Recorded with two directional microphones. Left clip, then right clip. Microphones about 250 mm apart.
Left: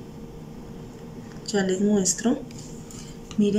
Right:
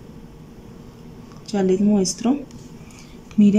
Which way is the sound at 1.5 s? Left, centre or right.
Centre.